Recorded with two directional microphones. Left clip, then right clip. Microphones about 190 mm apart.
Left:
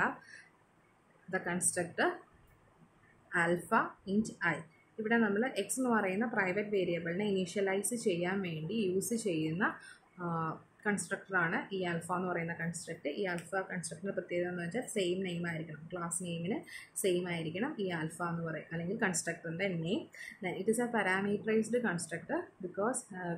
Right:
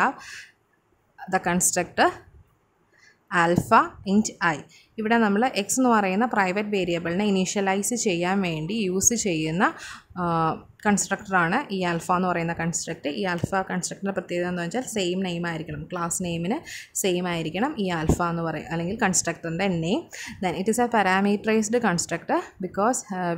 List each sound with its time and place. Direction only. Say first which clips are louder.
1.3 s speech: right 12 dB; 60° right (ahead or behind)
3.3 s speech: right 11 dB; 55° right (ahead or behind)